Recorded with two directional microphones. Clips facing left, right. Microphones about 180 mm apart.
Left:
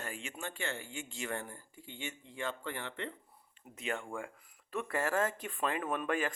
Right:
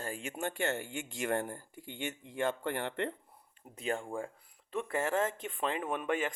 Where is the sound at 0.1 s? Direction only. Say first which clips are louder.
Right 5 dB; 45° right (ahead or behind).